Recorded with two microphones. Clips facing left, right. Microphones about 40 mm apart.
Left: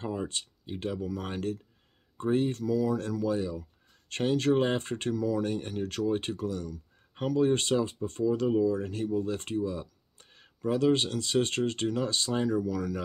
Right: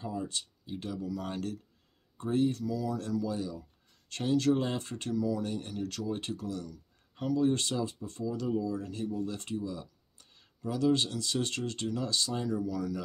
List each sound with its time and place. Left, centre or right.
0.0 s speech: left
1.3 s speech: left
12.6 s speech: left